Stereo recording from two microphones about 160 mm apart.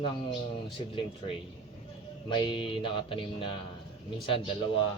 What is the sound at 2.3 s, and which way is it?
Music, 30° left (ahead or behind).